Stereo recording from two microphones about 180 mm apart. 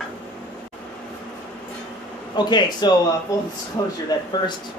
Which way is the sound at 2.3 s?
25° left (ahead or behind).